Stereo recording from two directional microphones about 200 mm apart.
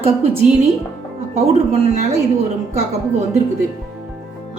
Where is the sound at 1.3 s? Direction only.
30° right (ahead or behind).